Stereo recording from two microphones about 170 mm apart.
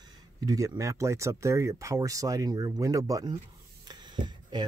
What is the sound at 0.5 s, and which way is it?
Speech, 20° right (ahead or behind).